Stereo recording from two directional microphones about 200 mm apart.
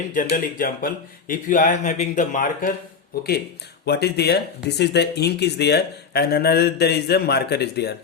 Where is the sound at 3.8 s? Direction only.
55° left (ahead or behind).